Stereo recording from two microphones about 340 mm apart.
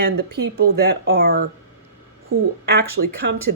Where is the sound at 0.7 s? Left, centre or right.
Right.